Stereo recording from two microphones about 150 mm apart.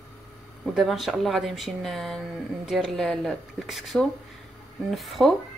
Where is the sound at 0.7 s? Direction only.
Centre (ahead or behind).